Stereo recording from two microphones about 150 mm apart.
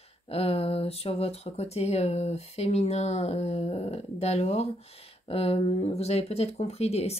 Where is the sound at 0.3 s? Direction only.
40° left (ahead or behind).